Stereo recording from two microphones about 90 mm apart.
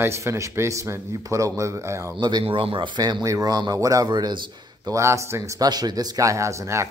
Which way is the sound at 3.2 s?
40° right (ahead or behind).